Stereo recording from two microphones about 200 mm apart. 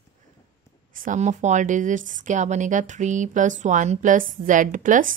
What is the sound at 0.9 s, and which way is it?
Speech, 40° right (ahead or behind).